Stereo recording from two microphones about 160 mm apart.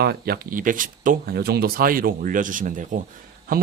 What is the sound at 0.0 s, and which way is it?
Speech, 80° right.